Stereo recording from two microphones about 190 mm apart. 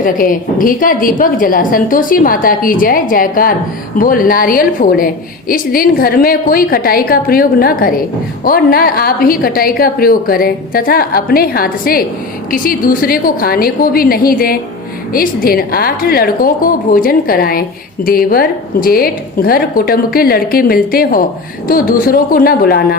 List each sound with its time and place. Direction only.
0.0 s a woman's voice: 45° left (ahead or behind)